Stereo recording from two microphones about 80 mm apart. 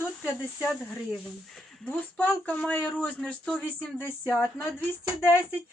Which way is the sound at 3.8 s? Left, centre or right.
Left.